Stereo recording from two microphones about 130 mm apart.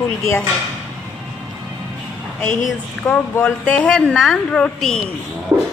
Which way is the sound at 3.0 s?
10° left (ahead or behind).